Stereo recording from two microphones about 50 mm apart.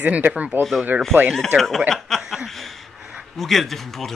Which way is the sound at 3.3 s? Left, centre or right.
Centre.